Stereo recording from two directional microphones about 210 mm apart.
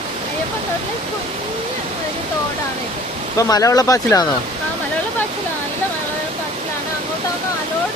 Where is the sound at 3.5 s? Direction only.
15° left (ahead or behind).